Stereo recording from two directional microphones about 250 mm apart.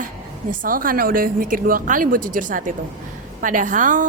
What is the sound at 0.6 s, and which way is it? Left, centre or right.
A woman's voice, right.